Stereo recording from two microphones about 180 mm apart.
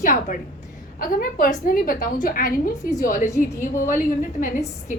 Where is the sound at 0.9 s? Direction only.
55° left (ahead or behind).